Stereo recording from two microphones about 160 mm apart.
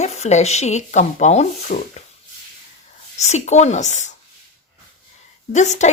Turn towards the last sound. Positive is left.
turn(degrees=45)  # may be behind; listen again after turning